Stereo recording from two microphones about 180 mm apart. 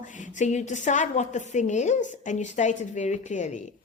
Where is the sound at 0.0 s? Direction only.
40° left (ahead or behind).